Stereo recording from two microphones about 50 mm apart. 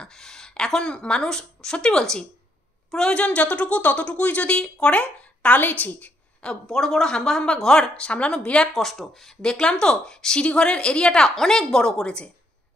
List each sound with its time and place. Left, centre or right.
0.0 s speech: centre
5.6 s a woman's voice: left
6.4 s speech: centre
8.7 s speech: centre
11.2 s speech: centre